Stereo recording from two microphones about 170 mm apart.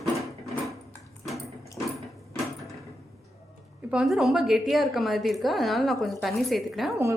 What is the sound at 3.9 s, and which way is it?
A woman's voice, 5° right (ahead or behind).